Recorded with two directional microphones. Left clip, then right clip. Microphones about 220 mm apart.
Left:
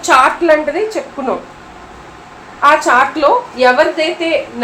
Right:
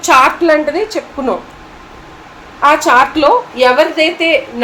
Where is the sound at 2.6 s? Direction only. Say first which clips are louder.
Right 1 dB; 35° right (ahead or behind).